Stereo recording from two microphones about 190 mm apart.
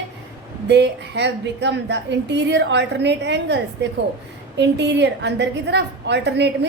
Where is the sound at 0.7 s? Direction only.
65° right (ahead or behind).